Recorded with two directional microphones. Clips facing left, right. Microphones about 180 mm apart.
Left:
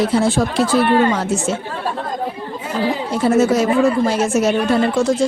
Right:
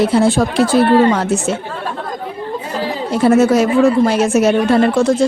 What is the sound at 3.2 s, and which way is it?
Speech, 65° right (ahead or behind).